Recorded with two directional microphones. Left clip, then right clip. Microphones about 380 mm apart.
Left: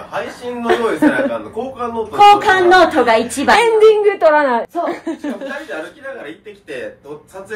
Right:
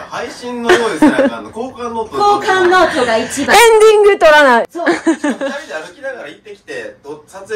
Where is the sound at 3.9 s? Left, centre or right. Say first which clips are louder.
Right 4 dB; right.